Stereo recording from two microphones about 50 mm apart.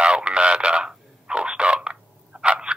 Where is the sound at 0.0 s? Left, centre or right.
Centre.